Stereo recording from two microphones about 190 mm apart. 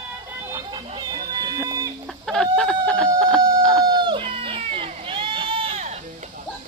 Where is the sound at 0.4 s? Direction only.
15° right (ahead or behind).